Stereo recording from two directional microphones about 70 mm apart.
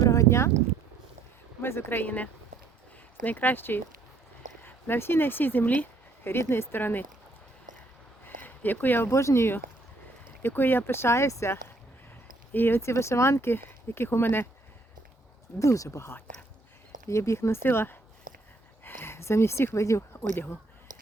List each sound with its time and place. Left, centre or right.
0.0 s a sound: left
1.6 s speech: left
6.3 s speech: left
8.2 s a sound: left
9.0 s speech: left
15.5 s speech: left